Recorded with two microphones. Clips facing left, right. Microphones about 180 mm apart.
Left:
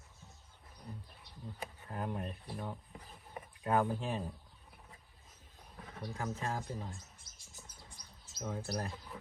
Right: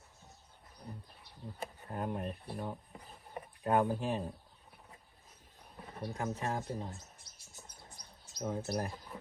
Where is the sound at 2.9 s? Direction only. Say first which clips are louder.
Right 1 dB; 35° right (ahead or behind).